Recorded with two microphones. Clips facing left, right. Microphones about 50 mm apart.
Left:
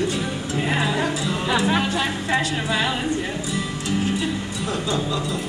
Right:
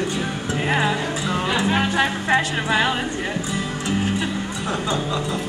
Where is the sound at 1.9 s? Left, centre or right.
Right.